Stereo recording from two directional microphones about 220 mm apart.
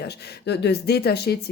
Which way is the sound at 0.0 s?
50° left (ahead or behind).